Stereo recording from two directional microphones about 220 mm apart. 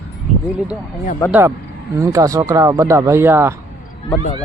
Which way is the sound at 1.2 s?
15° left (ahead or behind).